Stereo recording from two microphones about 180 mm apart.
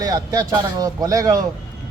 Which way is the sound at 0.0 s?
20° right (ahead or behind).